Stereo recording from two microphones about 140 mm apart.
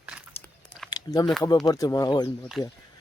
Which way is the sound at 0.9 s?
30° left (ahead or behind).